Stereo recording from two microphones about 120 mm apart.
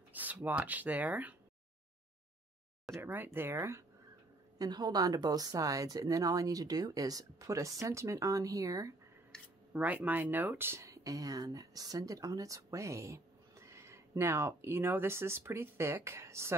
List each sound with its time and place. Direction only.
0.1 s speech: 15° right (ahead or behind)
2.9 s speech: 15° right (ahead or behind)
4.6 s speech: 35° right (ahead or behind)
9.3 s a sound: 5° left (ahead or behind)
9.7 s speech: 15° right (ahead or behind)